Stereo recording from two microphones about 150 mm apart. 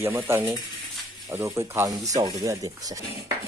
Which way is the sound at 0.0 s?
15° right (ahead or behind).